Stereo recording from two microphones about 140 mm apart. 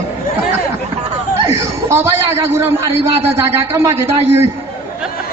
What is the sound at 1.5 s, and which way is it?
A man's voice, 20° right (ahead or behind).